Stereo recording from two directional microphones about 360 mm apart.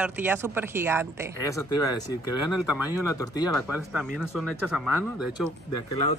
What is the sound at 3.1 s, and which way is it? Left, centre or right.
Speech, centre.